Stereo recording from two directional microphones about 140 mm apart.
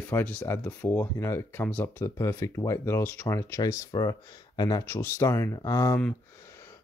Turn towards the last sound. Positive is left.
turn(degrees=25)  # may be behind; listen again after turning